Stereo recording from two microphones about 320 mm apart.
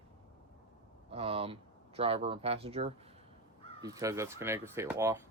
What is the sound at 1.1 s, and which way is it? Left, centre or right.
Speech, centre.